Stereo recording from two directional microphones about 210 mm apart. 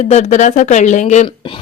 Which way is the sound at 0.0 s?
35° left (ahead or behind).